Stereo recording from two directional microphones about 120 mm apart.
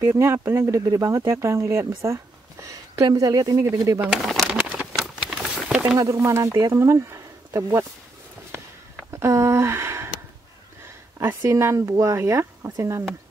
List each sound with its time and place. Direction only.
0.0 s speech: 20° right (ahead or behind)
2.0 s a sound: 25° right (ahead or behind)
3.1 s speech: 30° right (ahead or behind)
4.0 s speech: centre (ahead or behind)
4.6 s a sound: 10° right (ahead or behind)
5.9 s speech: 25° right (ahead or behind)
9.1 s speech: 25° right (ahead or behind)
11.1 s speech: 25° right (ahead or behind)